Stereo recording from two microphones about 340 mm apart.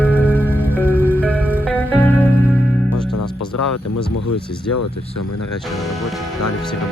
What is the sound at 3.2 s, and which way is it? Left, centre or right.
Music, left.